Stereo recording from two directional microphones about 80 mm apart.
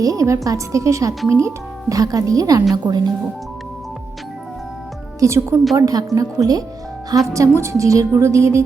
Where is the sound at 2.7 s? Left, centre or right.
Right.